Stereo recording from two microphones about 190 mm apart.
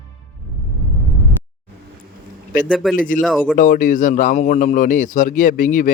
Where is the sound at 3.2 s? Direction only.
Centre (ahead or behind).